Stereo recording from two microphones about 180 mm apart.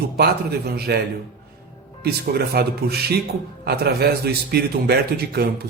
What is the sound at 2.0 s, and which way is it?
A man's voice, 60° right (ahead or behind).